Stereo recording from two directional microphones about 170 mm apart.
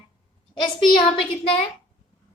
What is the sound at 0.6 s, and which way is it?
A woman's voice, 25° left (ahead or behind).